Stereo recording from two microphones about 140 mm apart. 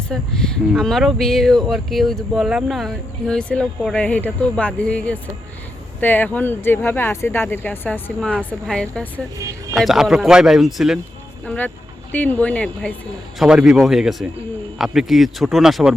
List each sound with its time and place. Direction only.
0.1 s speech: 5° left (ahead or behind)
9.4 s speech: 20° right (ahead or behind)
9.7 s speech: centre (ahead or behind)
11.4 s speech: 10° left (ahead or behind)
13.4 s speech: 5° right (ahead or behind)